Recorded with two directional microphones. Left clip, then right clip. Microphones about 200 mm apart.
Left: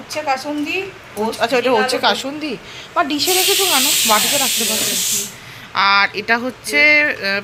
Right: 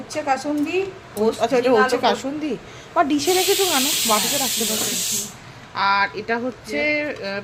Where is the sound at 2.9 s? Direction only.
30° right (ahead or behind).